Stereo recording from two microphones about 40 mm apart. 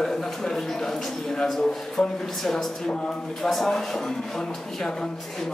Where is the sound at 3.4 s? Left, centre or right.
Centre.